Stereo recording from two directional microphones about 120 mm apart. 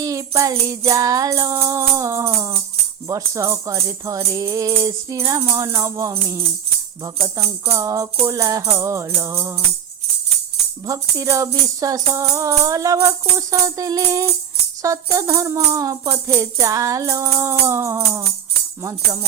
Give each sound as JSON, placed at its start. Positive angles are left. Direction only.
{"t": 0.0, "sound": "music", "side_deg": -30}
{"t": 10.8, "sound": "music", "side_deg": -25}